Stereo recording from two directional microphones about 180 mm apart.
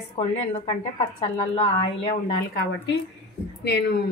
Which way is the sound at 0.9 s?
35° left (ahead or behind).